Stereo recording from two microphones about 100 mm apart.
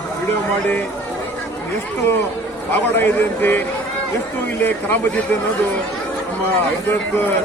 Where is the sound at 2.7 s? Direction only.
20° left (ahead or behind).